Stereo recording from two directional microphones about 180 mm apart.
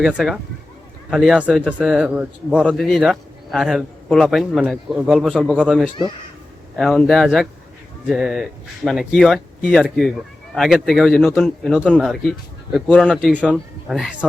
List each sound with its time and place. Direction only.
0.0 s a man's voice: centre (ahead or behind)